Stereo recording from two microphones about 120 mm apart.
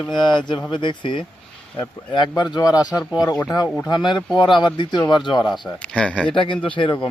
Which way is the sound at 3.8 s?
40° left (ahead or behind).